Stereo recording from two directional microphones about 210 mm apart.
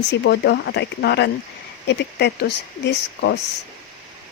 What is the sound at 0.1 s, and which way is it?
Speech, 55° left (ahead or behind).